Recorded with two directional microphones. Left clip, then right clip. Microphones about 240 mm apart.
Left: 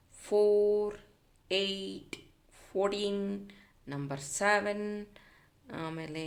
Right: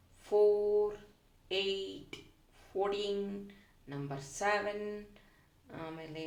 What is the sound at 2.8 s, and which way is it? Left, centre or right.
A woman's voice, left.